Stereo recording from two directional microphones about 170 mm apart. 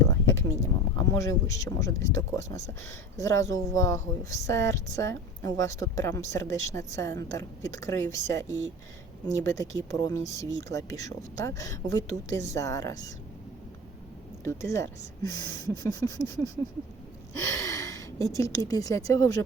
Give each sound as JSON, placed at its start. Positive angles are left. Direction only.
{"t": 0.0, "sound": "a sound", "side_deg": 15}
{"t": 0.9, "sound": "speech", "side_deg": 20}
{"t": 14.4, "sound": "speech", "side_deg": 15}